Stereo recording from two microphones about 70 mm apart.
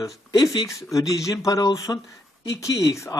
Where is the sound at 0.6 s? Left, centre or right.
Left.